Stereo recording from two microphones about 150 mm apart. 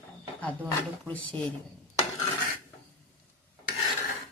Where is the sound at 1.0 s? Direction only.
10° left (ahead or behind).